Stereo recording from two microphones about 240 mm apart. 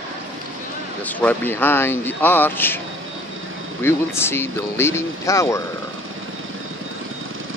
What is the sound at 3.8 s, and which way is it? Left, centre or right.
Speech, centre.